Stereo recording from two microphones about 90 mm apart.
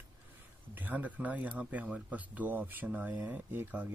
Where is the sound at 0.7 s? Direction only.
20° right (ahead or behind).